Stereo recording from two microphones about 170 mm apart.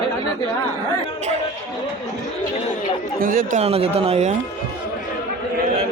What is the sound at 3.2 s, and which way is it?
Speech, 55° right (ahead or behind).